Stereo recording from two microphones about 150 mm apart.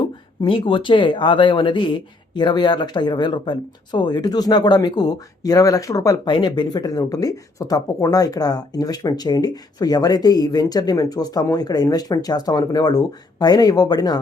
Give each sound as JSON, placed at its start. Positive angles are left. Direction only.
{"t": 0.4, "sound": "speech", "side_deg": 35}